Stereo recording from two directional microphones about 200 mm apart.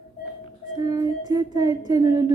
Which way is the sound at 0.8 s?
20° right (ahead or behind).